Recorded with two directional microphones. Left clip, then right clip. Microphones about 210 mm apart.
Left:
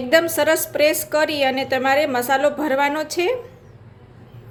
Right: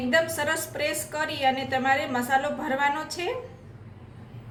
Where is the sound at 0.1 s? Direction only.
45° left (ahead or behind).